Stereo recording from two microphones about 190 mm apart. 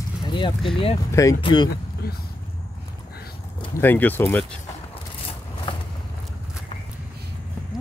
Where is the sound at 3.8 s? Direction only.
10° left (ahead or behind).